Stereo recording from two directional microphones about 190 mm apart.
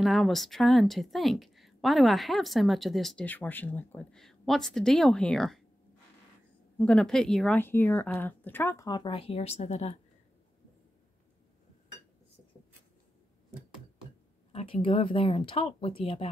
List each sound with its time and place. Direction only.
0.0 s a woman's voice: centre (ahead or behind)
6.8 s speech: 5° left (ahead or behind); by 9.9 s 35° left (ahead or behind)
14.5 s speech: 30° left (ahead or behind)